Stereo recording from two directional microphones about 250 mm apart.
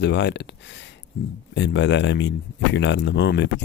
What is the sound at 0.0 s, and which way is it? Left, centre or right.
Speech, left.